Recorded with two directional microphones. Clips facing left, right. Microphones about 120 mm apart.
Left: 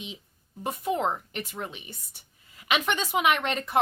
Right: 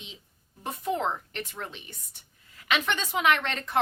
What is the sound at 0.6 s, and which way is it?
A woman's voice, 10° left (ahead or behind).